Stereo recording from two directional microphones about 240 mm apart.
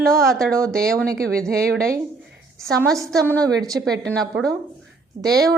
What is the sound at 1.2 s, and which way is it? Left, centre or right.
Speech, right.